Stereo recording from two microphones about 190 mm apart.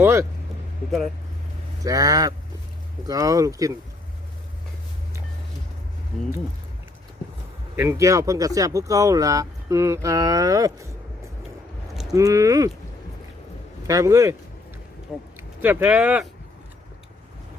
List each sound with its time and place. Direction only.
0.0 s speech: 15° right (ahead or behind)
0.9 s speech: centre (ahead or behind)
1.8 s speech: 20° right (ahead or behind)
7.8 s speech: 15° right (ahead or behind)
12.1 s speech: 15° right (ahead or behind)
13.8 s speech: 15° right (ahead or behind)
15.4 s speech: 10° right (ahead or behind)